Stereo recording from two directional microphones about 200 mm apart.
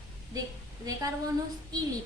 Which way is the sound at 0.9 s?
20° right (ahead or behind).